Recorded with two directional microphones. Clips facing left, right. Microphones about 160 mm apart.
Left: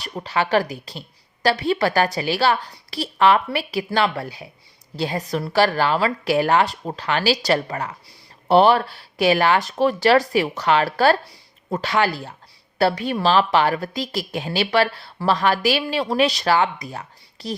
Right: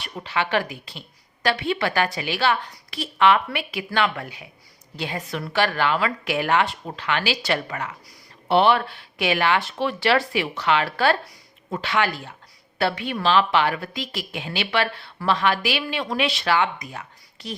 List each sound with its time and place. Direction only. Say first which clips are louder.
0.0 s a woman's voice: left 3 dB; 40° left (ahead or behind)